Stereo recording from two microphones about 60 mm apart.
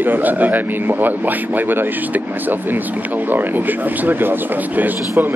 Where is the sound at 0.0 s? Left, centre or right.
Right.